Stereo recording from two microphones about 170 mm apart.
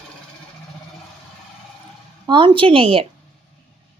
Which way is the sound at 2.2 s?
25° right (ahead or behind).